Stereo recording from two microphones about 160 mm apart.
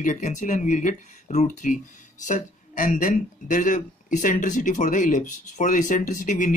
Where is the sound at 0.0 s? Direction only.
50° left (ahead or behind).